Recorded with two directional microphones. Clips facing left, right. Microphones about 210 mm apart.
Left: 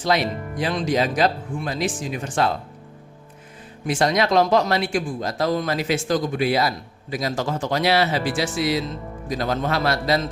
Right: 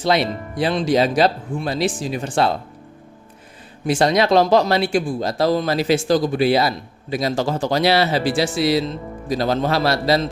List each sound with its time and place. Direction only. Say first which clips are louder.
0.0 s speech: right 3 dB; 30° right (ahead or behind)
3.8 s speech: right 4 dB; 30° right (ahead or behind)